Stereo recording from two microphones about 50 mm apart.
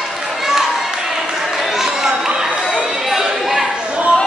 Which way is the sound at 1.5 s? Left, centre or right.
Centre.